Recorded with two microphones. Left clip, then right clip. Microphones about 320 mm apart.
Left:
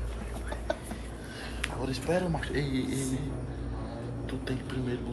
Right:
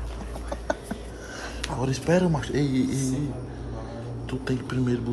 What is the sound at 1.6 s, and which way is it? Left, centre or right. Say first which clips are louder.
Speech: right 5 dB; right.